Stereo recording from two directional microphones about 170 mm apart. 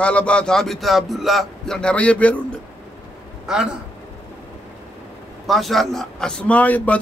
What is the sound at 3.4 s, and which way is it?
Speech, 5° right (ahead or behind).